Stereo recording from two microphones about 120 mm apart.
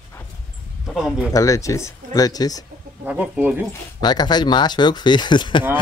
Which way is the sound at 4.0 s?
35° left (ahead or behind).